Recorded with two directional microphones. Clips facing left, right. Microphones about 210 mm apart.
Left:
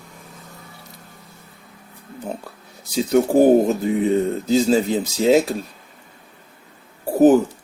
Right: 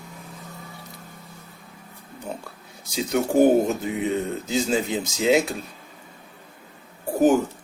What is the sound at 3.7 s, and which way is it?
Speech, 35° left (ahead or behind).